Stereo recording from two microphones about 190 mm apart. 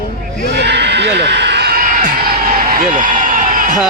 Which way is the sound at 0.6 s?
65° right (ahead or behind).